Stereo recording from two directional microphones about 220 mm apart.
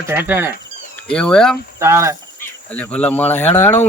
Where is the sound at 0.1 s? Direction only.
10° right (ahead or behind).